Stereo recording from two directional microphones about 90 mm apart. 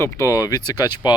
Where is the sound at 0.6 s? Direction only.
50° left (ahead or behind).